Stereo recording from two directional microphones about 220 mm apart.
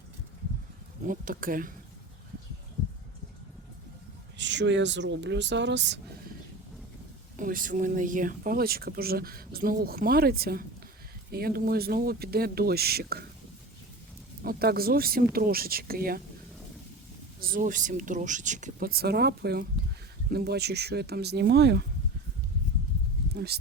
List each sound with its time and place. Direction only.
1.0 s speech: 40° right (ahead or behind)
4.4 s speech: 55° right (ahead or behind)
7.3 s speech: 40° right (ahead or behind)
14.4 s speech: 45° right (ahead or behind)
17.4 s speech: 40° right (ahead or behind)
23.3 s speech: 45° right (ahead or behind)